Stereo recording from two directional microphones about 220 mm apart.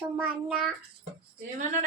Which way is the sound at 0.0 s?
5° right (ahead or behind).